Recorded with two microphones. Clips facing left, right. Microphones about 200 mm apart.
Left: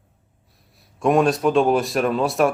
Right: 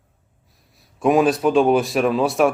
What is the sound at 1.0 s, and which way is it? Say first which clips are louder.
A man's voice: right 1 dB; centre (ahead or behind).